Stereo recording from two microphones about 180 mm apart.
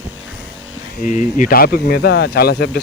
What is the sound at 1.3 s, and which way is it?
Speech, 50° left (ahead or behind).